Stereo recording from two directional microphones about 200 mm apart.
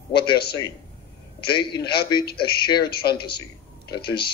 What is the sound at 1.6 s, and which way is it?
A man's voice, 55° left (ahead or behind).